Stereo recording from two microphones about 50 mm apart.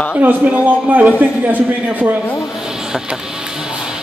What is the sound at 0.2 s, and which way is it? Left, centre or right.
Speech, right.